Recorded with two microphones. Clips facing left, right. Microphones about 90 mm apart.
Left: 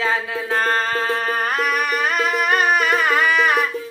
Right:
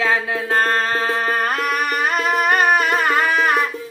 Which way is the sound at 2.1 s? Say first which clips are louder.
Right 3 dB; 45° right (ahead or behind).